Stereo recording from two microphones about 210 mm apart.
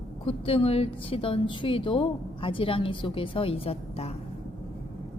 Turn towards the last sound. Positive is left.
turn(degrees=30)  # may be behind; listen again after turning